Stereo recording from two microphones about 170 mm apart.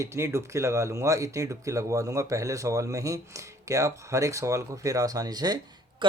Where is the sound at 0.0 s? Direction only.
15° right (ahead or behind).